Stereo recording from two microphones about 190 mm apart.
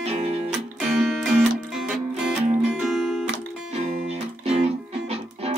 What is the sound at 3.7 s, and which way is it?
Music, 35° right (ahead or behind).